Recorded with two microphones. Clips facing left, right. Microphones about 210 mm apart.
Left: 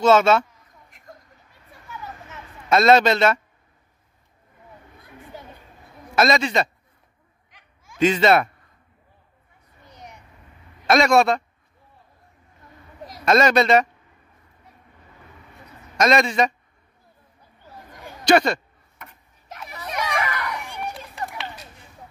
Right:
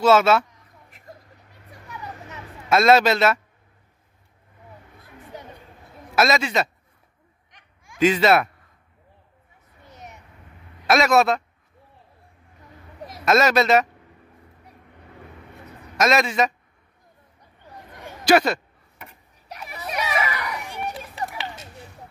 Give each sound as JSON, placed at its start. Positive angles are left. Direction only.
{"t": 0.0, "sound": "a sound", "side_deg": -5}
{"t": 1.9, "sound": "vehicle", "side_deg": -20}
{"t": 2.7, "sound": "a man's voice", "side_deg": -5}
{"t": 6.1, "sound": "a man's voice", "side_deg": -5}
{"t": 7.8, "sound": "speech", "side_deg": -10}
{"t": 9.8, "sound": "a sound", "side_deg": -5}
{"t": 10.9, "sound": "a man's voice", "side_deg": -5}
{"t": 13.0, "sound": "speech", "side_deg": 0}
{"t": 16.0, "sound": "a man's voice", "side_deg": -5}
{"t": 18.2, "sound": "a sound", "side_deg": -5}